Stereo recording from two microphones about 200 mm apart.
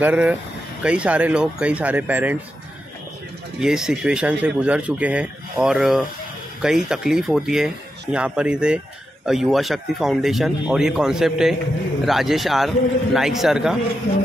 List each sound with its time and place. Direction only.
0.0 s speech: 5° right (ahead or behind)
3.5 s speech: 5° right (ahead or behind)